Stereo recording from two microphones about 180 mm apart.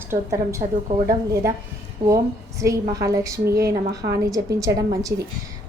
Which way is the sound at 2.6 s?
20° right (ahead or behind).